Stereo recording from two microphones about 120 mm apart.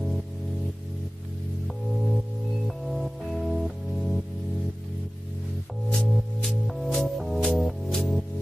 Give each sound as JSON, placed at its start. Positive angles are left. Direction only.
{"t": 2.9, "sound": "music", "side_deg": 0}
{"t": 5.9, "sound": "music", "side_deg": 5}